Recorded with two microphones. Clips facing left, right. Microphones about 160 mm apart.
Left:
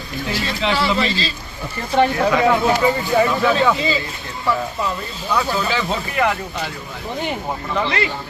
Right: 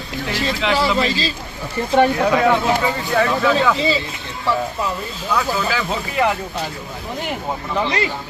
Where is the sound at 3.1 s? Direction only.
10° left (ahead or behind).